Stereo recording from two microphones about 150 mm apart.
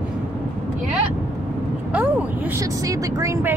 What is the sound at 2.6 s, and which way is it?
Speech, 20° right (ahead or behind).